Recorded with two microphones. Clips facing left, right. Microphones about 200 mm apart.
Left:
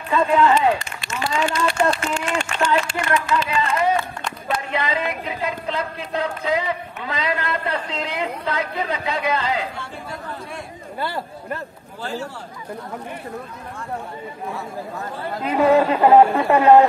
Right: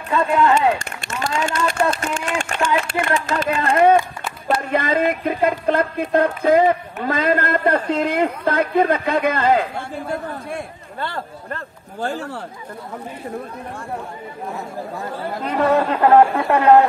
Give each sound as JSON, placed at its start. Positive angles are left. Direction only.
{"t": 0.1, "sound": "a man's voice", "side_deg": 0}
{"t": 0.7, "sound": "speech", "side_deg": -50}
{"t": 11.0, "sound": "speech", "side_deg": 10}
{"t": 12.0, "sound": "speech", "side_deg": -55}
{"t": 15.4, "sound": "a man's voice", "side_deg": 5}